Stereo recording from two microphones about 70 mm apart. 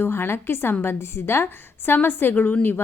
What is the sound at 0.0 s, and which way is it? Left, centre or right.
A woman's voice, left.